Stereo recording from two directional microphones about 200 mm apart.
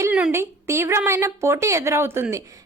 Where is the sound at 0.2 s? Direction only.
10° right (ahead or behind).